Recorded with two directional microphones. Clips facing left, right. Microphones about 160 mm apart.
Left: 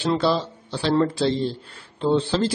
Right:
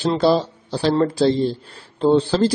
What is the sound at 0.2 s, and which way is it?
Speech, 40° right (ahead or behind).